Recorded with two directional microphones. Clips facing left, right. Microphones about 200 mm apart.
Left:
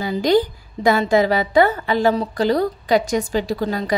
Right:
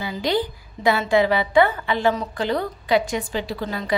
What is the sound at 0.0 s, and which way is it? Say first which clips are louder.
A woman's voice: left 6 dB; 45° left (ahead or behind).